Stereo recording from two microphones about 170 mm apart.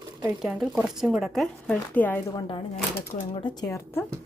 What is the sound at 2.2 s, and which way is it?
Speech, 25° left (ahead or behind).